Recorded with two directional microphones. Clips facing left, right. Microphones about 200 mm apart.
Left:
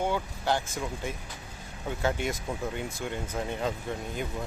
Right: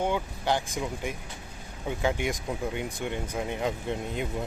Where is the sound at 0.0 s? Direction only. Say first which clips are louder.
Right 1 dB; 15° right (ahead or behind).